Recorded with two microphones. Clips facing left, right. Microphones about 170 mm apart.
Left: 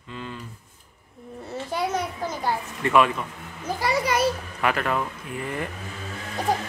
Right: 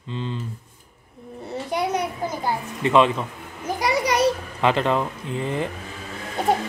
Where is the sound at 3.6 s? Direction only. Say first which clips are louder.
Right 2 dB; 20° right (ahead or behind).